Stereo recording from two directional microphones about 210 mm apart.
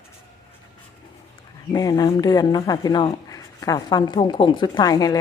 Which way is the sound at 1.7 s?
15° left (ahead or behind).